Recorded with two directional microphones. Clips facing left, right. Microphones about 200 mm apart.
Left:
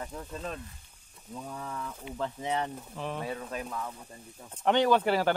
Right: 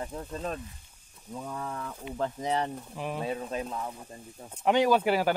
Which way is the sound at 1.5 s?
55° right (ahead or behind).